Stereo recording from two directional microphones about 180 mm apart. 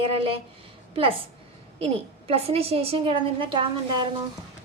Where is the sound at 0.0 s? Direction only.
30° right (ahead or behind).